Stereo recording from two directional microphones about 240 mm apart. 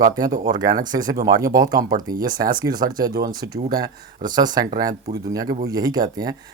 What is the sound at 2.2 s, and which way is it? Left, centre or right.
Speech, centre.